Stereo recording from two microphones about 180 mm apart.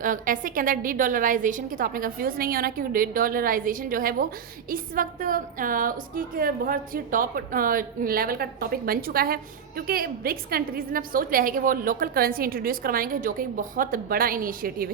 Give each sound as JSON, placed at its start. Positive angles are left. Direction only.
{"t": 0.0, "sound": "a woman's voice", "side_deg": -50}